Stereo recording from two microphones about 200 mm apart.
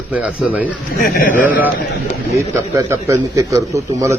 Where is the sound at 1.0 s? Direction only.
45° left (ahead or behind).